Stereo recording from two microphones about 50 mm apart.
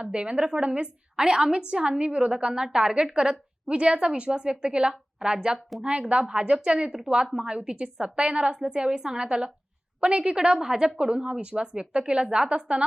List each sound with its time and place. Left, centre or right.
0.0 s a woman's voice: right